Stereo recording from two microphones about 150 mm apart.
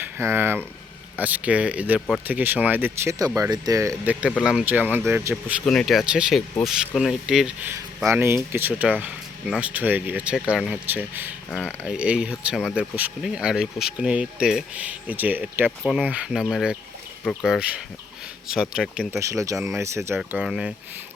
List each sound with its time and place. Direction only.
0.0 s speech: 15° right (ahead or behind)
4.0 s speech: 10° right (ahead or behind)
8.0 s speech: 15° right (ahead or behind)
19.2 s speech: 20° right (ahead or behind)
19.5 s speech: 5° right (ahead or behind)
19.8 s speech: 20° right (ahead or behind)
20.1 s speech: 5° right (ahead or behind)